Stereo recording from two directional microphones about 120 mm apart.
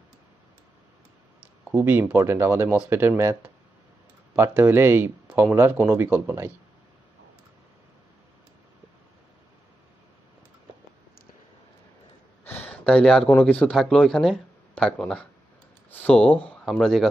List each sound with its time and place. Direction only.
1.7 s speech: 15° right (ahead or behind)
12.4 s speech: 15° left (ahead or behind)